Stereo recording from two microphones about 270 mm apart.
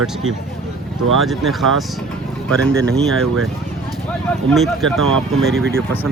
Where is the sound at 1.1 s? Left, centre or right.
Centre.